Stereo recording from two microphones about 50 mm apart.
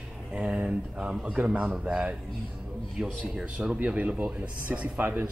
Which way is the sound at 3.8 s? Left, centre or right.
Right.